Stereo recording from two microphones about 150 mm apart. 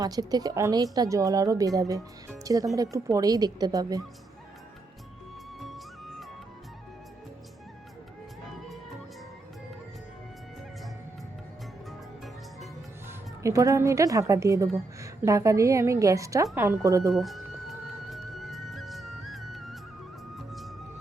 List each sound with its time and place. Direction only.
0.0 s a woman's voice: 25° right (ahead or behind)
5.5 s music: centre (ahead or behind)
13.4 s a woman's voice: 20° right (ahead or behind)
17.1 s music: centre (ahead or behind)